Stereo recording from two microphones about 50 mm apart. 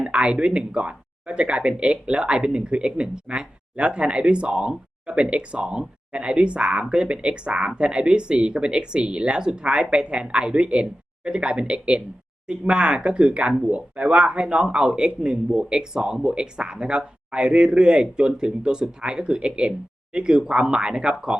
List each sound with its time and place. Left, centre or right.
0.0 s a man's voice: right